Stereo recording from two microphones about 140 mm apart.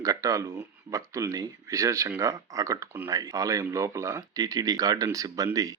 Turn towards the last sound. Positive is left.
turn(degrees=-25)  # may be behind; listen again after turning